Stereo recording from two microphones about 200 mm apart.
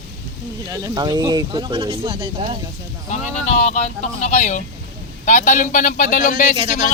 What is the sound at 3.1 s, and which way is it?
Speech, 35° left (ahead or behind).